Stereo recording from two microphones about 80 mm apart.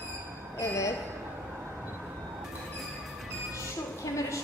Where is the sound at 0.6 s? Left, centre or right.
Left.